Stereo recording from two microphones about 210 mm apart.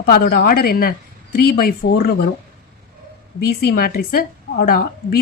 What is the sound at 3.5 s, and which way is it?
Speech, 50° left (ahead or behind).